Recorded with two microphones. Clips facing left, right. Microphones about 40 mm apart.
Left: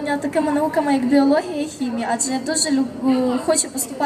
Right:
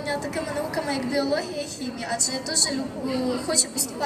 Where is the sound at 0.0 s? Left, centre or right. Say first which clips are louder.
Left 8 dB; left.